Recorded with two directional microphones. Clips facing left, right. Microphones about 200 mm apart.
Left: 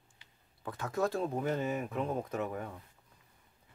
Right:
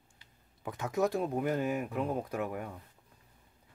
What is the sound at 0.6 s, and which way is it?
Speech, 15° right (ahead or behind).